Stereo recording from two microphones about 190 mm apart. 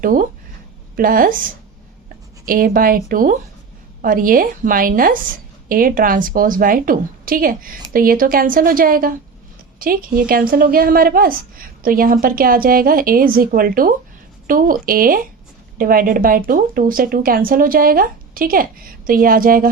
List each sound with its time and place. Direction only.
0.0 s a woman's voice: 45° right (ahead or behind)
2.5 s a woman's voice: 45° right (ahead or behind)